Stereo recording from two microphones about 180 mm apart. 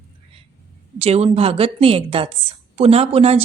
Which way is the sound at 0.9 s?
35° right (ahead or behind).